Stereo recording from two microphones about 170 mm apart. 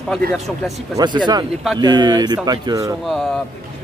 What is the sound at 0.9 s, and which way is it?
A man's voice, 25° right (ahead or behind).